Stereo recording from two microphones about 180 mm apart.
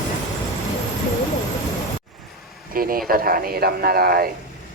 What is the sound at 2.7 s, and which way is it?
Speech, 55° right (ahead or behind).